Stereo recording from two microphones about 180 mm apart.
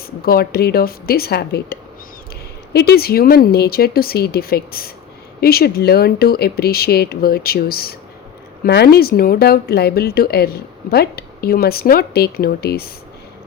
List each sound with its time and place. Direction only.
0.2 s speech: 60° left (ahead or behind)